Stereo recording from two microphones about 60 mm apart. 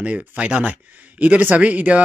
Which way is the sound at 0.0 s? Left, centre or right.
Centre.